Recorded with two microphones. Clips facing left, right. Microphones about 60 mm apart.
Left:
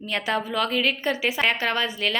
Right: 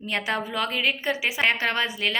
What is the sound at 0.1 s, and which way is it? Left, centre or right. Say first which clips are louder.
Speech: left 2 dB; right.